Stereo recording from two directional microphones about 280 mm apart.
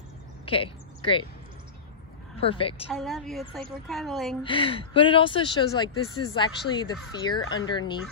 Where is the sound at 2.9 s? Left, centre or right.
Centre.